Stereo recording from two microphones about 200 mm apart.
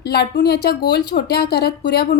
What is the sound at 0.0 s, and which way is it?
A woman's voice, 50° left (ahead or behind).